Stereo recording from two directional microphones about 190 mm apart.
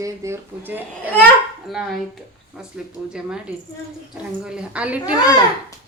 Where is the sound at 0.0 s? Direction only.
15° right (ahead or behind).